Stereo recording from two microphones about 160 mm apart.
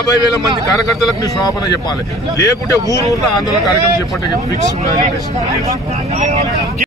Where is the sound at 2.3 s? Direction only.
20° left (ahead or behind).